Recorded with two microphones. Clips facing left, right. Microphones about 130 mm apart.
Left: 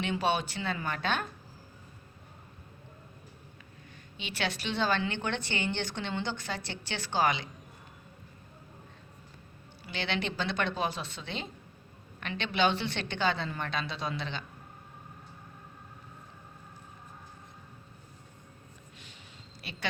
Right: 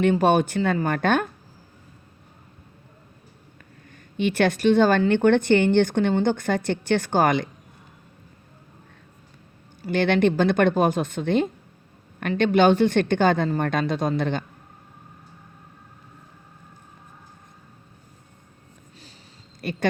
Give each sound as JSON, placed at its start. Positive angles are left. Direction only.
{"t": 0.0, "sound": "speech", "side_deg": -50}
{"t": 3.9, "sound": "speech", "side_deg": -50}
{"t": 9.8, "sound": "speech", "side_deg": -50}
{"t": 19.6, "sound": "speech", "side_deg": -50}